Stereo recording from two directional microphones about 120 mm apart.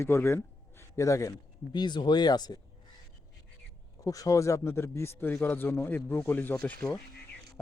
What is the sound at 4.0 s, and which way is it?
A man's voice, 30° left (ahead or behind).